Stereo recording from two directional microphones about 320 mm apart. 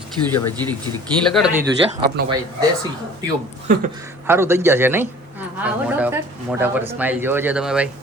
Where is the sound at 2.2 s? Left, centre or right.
Right.